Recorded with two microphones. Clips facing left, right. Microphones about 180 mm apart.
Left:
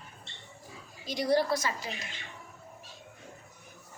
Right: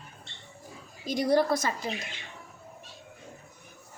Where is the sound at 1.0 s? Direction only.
50° right (ahead or behind).